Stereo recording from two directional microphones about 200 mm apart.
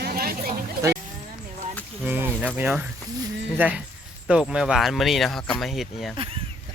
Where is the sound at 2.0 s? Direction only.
10° right (ahead or behind).